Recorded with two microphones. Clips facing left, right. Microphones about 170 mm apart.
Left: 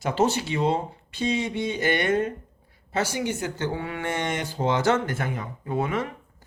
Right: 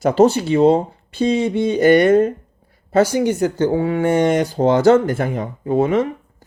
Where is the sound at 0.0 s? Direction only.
40° right (ahead or behind).